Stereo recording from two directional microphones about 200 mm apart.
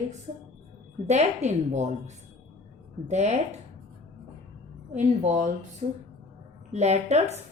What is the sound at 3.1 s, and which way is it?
Speech, 35° right (ahead or behind).